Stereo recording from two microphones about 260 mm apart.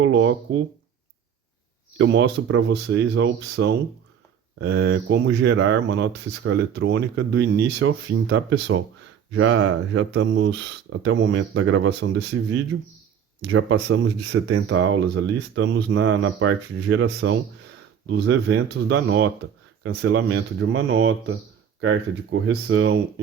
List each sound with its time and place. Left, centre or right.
0.0 s speech: right
2.0 s speech: right
12.7 s speech: right
13.4 s speech: right